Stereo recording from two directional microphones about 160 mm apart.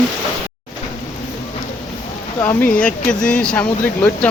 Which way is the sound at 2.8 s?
5° left (ahead or behind).